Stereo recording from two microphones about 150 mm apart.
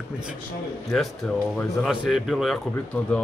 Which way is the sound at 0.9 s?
5° left (ahead or behind).